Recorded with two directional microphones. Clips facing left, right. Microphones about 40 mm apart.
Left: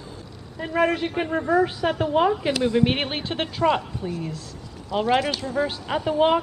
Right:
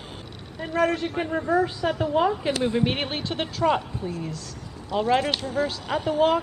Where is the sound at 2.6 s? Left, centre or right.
Centre.